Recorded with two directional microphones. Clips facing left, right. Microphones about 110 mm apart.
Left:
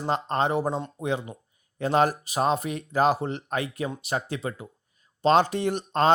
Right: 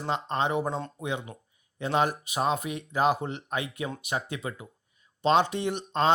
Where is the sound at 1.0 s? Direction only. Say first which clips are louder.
Left 4 dB; 35° left (ahead or behind).